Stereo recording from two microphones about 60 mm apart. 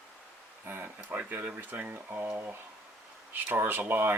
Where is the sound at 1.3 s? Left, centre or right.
Right.